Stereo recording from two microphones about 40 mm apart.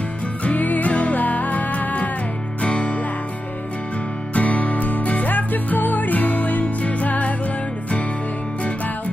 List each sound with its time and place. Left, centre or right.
0.4 s music: left
2.6 s music: left
4.3 s music: left